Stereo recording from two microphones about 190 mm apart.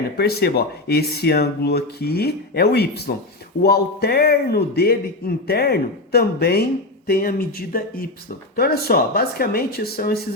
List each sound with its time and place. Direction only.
0.2 s speech: 55° left (ahead or behind)